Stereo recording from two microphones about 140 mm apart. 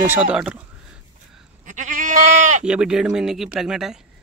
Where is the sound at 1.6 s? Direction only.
65° right (ahead or behind).